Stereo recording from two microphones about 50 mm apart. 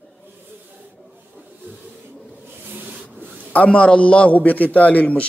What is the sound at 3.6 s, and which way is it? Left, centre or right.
A man's voice, left.